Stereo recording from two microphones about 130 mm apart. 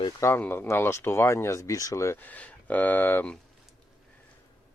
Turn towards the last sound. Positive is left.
turn(degrees=15)  # may be behind; listen again after turning